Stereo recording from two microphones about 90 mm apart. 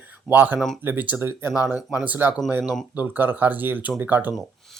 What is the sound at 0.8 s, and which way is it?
Speech, 20° right (ahead or behind).